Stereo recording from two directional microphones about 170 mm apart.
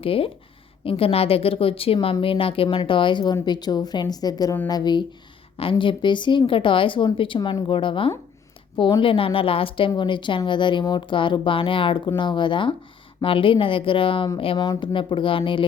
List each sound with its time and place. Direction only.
0.0 s a woman's voice: 30° left (ahead or behind)